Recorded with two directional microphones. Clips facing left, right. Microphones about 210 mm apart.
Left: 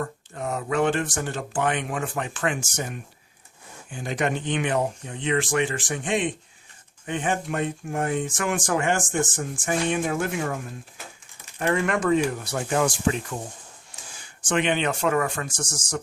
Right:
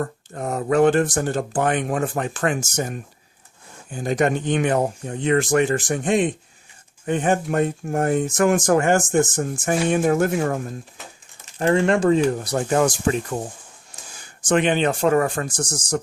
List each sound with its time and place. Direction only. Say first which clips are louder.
0.0 s speech: right 3 dB; 40° right (ahead or behind)
11.6 s speech: right 6 dB; 30° right (ahead or behind)